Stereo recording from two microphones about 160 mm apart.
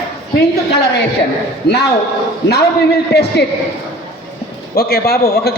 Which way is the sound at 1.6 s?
90° left.